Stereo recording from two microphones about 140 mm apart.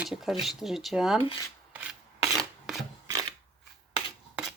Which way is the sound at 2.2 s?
Centre (ahead or behind).